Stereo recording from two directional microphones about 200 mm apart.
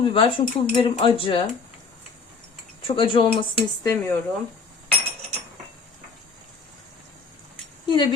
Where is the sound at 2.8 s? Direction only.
25° left (ahead or behind).